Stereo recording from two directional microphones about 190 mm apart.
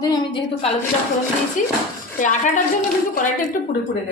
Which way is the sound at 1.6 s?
45° left (ahead or behind).